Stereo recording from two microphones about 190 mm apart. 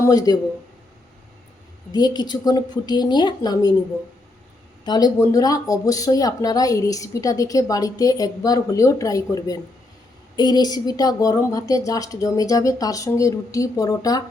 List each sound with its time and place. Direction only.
0.1 s a woman's voice: 20° left (ahead or behind)
1.9 s a woman's voice: 20° left (ahead or behind)
4.9 s a woman's voice: 20° left (ahead or behind)